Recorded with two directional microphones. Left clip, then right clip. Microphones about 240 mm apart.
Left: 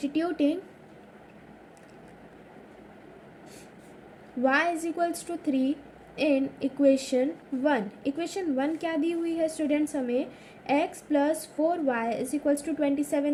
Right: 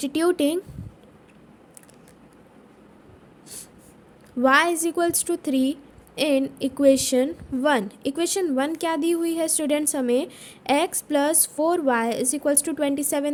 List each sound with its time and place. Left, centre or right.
0.0 s a woman's voice: right
4.4 s a woman's voice: right